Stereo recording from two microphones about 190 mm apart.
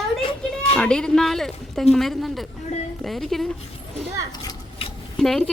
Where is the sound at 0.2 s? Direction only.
30° left (ahead or behind).